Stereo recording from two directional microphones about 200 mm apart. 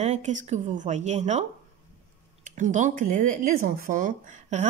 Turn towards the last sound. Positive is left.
turn(degrees=-40)  # may be behind; listen again after turning